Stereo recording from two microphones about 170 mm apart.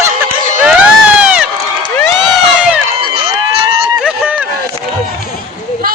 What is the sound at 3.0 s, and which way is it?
Run, 25° right (ahead or behind).